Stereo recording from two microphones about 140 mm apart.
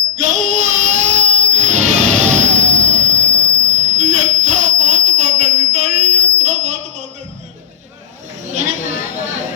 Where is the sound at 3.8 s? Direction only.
55° right (ahead or behind).